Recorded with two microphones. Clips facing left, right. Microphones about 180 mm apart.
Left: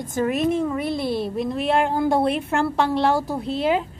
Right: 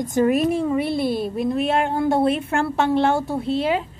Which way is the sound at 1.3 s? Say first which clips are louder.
Right 1 dB; centre (ahead or behind).